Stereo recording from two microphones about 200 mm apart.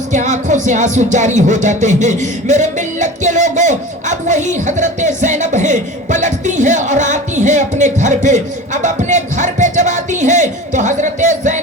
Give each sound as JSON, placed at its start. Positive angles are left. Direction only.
{"t": 0.1, "sound": "music", "side_deg": -40}